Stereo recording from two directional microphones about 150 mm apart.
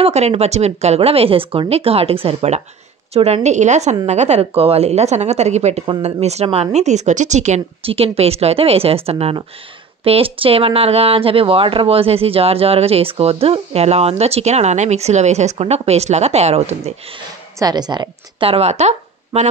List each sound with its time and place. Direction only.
0.0 s a woman's voice: 45° right (ahead or behind)
17.6 s a woman's voice: 25° right (ahead or behind); by 19.4 s 45° right (ahead or behind)